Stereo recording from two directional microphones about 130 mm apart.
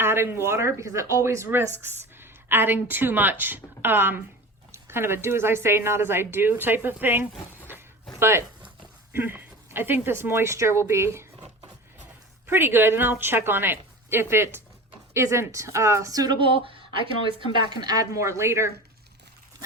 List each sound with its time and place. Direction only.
0.0 s a woman's voice: 20° right (ahead or behind)
12.5 s a woman's voice: 15° right (ahead or behind)